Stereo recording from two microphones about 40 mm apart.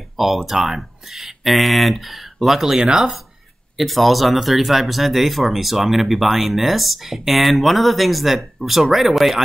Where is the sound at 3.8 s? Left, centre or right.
Centre.